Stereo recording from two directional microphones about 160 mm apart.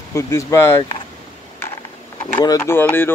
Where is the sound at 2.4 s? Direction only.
20° left (ahead or behind).